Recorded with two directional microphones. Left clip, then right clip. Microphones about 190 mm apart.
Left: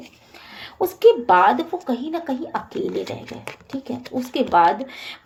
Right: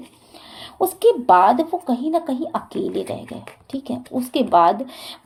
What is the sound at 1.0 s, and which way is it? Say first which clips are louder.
Speech: even; 40° right (ahead or behind).